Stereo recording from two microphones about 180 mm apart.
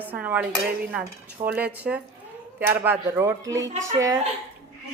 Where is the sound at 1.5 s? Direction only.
10° right (ahead or behind).